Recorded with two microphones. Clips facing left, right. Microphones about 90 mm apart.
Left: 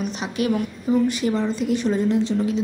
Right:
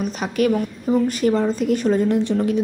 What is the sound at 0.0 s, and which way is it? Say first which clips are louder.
A woman's voice: right 4 dB; 45° right (ahead or behind).